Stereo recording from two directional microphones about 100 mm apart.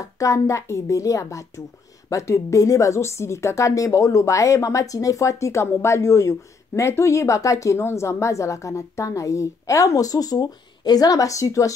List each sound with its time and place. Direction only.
0.2 s a woman's voice: 35° left (ahead or behind)